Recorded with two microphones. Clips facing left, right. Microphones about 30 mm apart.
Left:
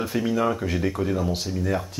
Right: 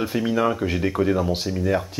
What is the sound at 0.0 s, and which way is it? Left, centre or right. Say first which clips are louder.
Speech: right 2 dB; centre.